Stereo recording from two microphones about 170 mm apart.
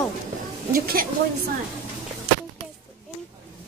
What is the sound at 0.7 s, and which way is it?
Speech, 55° right (ahead or behind).